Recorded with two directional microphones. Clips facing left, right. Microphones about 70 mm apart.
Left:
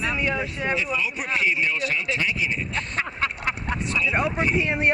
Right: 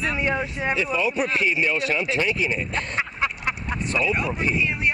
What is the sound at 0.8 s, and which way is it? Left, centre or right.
Speech, right.